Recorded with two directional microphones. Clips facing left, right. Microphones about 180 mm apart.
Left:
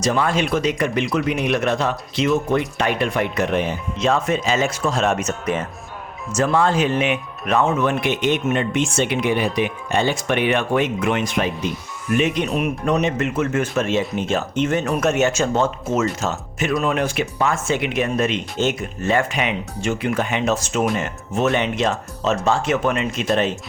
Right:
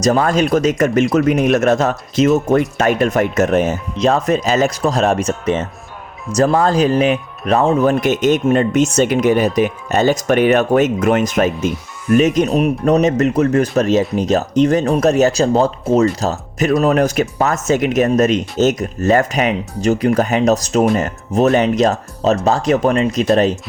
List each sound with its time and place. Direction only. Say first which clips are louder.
0.0 s speech: right 6 dB; 40° right (ahead or behind)
6.3 s speech: right 4 dB; 40° right (ahead or behind)